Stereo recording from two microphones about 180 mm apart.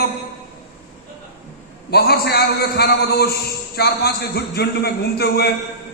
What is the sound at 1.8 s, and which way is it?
A man's voice, 60° left (ahead or behind).